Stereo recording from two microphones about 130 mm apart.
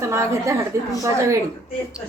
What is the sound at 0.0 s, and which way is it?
Speech, 20° right (ahead or behind).